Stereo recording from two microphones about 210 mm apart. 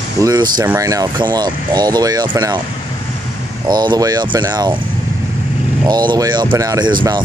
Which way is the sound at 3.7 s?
20° right (ahead or behind).